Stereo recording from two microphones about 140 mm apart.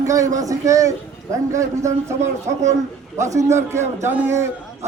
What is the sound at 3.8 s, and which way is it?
Speech, 55° right (ahead or behind).